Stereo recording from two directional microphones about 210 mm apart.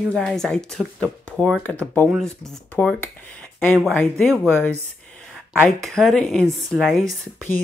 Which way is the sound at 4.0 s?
5° left (ahead or behind).